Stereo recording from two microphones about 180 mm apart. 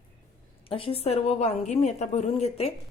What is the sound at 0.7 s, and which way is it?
A woman's voice, 30° left (ahead or behind).